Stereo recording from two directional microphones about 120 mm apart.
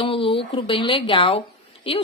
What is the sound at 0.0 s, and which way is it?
A woman's voice, 45° left (ahead or behind).